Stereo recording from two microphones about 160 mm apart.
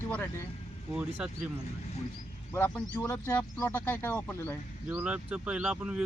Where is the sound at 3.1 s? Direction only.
10° left (ahead or behind).